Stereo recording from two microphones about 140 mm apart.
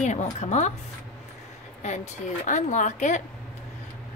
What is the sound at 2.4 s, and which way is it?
Speech, 60° left (ahead or behind).